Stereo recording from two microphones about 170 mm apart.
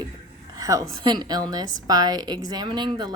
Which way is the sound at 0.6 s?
20° right (ahead or behind).